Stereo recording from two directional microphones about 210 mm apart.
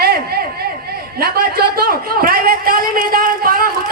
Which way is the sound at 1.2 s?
45° right (ahead or behind).